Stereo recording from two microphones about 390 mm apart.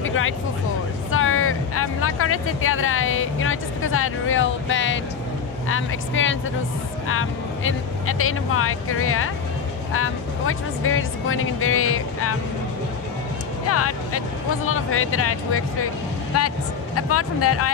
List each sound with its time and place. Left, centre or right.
0.0 s music: left
1.1 s speech: left
13.7 s speech: left